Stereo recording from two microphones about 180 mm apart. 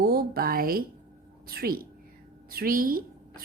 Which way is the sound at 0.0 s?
55° right (ahead or behind).